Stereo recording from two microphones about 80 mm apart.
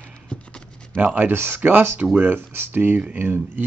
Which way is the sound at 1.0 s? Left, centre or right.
Centre.